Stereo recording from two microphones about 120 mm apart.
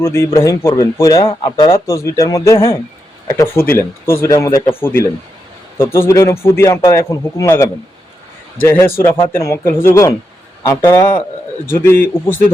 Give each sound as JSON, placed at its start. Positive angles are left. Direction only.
{"t": 0.0, "sound": "speech", "side_deg": 20}
{"t": 1.7, "sound": "a man's voice", "side_deg": 25}